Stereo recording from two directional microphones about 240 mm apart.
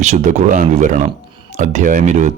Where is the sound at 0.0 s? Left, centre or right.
Right.